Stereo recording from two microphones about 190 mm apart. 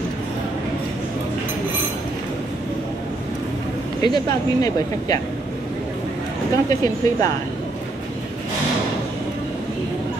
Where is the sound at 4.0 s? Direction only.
20° left (ahead or behind).